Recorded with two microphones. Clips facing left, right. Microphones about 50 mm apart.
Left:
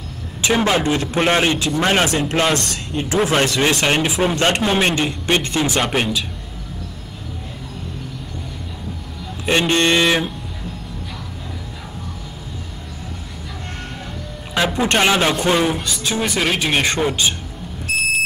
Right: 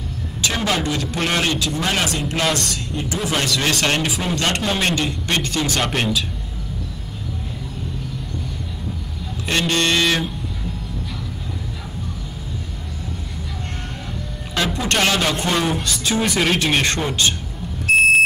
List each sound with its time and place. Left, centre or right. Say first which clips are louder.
0.4 s a man's voice: left 5 dB; centre
3.6 s speech: left 3 dB; centre
4.2 s a man's voice: left 4 dB; left; by 6.2 s centre
9.5 s a man's voice: left 3 dB; left
14.5 s speech: left 3 dB; centre